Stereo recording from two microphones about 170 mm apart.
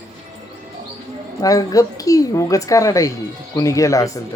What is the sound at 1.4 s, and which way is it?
Speech, 20° left (ahead or behind).